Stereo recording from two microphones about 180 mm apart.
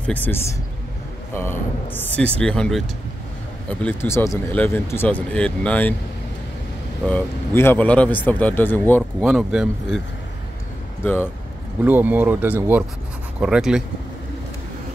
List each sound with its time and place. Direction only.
0.0 s a man's voice: 10° left (ahead or behind)
3.8 s speech: 15° left (ahead or behind)
7.1 s speech: 10° left (ahead or behind)
9.2 s speech: 5° right (ahead or behind)
11.8 s speech: 10° right (ahead or behind)